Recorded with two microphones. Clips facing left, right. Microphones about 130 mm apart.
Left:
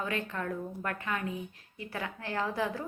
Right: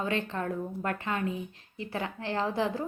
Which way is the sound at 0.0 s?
30° right (ahead or behind).